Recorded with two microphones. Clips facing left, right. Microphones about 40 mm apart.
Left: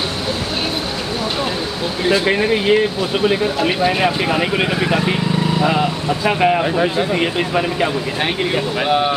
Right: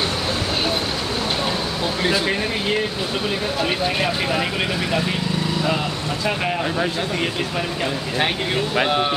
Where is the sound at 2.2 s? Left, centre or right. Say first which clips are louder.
Left 7 dB; left.